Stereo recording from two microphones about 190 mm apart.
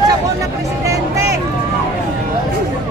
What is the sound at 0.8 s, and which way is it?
Vehicle, 15° right (ahead or behind).